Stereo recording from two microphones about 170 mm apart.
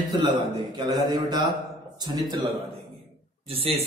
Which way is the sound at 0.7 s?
25° right (ahead or behind).